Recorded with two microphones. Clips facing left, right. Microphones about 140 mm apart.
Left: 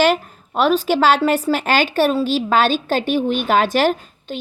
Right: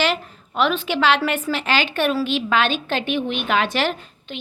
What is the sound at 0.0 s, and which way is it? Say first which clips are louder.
A woman's voice: left 6 dB; 45° left (ahead or behind).